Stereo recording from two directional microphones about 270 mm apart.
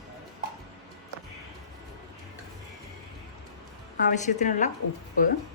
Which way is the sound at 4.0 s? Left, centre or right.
Left.